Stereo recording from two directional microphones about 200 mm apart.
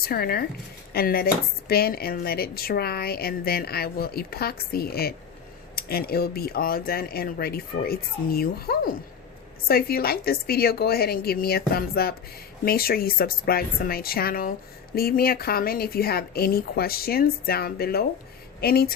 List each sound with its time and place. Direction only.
0.0 s speech: 50° left (ahead or behind)